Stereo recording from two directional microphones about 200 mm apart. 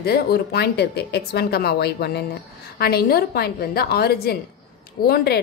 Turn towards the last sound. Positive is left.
turn(degrees=55)  # may be behind; listen again after turning